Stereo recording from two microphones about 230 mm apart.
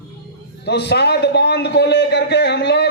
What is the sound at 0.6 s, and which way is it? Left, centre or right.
Speech, left.